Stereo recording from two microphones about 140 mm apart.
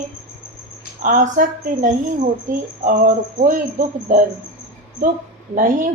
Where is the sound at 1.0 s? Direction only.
70° right (ahead or behind).